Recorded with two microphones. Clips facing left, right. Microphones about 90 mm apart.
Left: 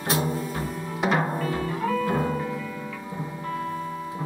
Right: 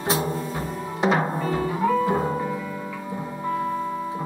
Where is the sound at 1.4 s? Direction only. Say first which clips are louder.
Right 3 dB; 30° right (ahead or behind).